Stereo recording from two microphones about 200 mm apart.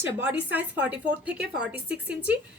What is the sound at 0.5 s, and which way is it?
A woman's voice, 5° right (ahead or behind).